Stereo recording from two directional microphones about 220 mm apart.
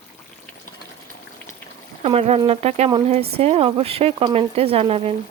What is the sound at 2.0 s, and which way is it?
Speech, 25° right (ahead or behind).